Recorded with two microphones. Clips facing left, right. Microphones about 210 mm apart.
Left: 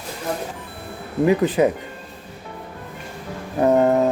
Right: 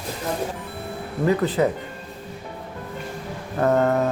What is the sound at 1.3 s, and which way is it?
Speech, 15° left (ahead or behind).